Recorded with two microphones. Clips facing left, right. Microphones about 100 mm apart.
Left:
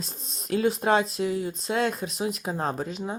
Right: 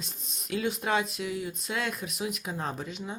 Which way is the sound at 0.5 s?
40° left (ahead or behind).